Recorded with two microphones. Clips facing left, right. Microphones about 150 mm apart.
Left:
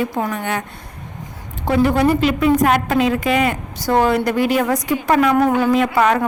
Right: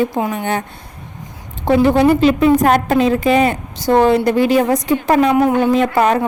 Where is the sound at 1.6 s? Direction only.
25° right (ahead or behind).